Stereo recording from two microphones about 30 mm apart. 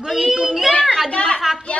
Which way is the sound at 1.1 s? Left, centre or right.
Left.